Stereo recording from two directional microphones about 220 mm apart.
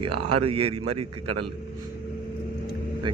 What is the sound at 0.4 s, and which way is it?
Speech, 25° right (ahead or behind).